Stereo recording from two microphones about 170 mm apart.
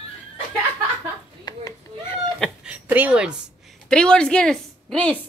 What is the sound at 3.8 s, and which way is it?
A woman's voice, 5° left (ahead or behind).